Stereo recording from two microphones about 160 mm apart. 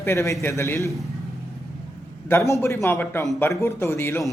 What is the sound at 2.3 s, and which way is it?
Speech, 15° left (ahead or behind).